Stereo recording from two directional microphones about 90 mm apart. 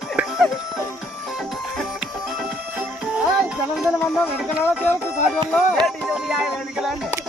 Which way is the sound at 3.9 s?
20° left (ahead or behind).